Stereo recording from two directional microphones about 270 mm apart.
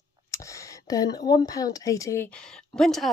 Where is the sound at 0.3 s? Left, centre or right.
Centre.